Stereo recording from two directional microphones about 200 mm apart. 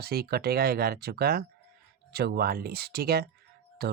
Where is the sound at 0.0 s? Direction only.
50° right (ahead or behind).